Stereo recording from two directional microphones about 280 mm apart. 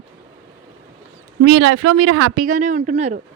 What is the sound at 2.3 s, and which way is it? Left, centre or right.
Speech, right.